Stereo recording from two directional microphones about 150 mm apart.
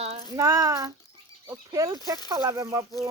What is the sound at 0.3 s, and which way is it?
Speech, 20° right (ahead or behind).